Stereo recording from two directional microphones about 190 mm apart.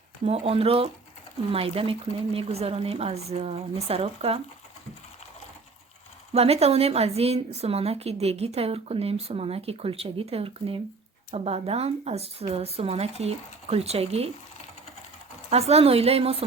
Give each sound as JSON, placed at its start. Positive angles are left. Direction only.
{"t": 0.3, "sound": "a woman's voice", "side_deg": -35}
{"t": 6.3, "sound": "a woman's voice", "side_deg": -30}
{"t": 15.4, "sound": "a woman's voice", "side_deg": -35}